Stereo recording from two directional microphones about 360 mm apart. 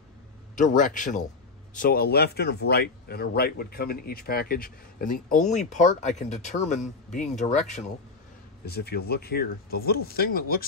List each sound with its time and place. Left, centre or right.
0.6 s speech: left